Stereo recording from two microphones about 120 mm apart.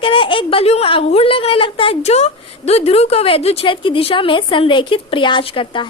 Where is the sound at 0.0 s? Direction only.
45° left (ahead or behind).